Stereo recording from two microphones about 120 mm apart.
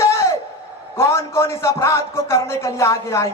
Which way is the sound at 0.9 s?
20° left (ahead or behind).